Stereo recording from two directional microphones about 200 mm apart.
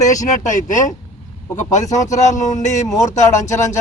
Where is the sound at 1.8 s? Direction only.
15° left (ahead or behind).